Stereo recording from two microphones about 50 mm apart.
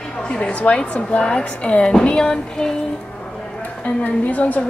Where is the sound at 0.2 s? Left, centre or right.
Left.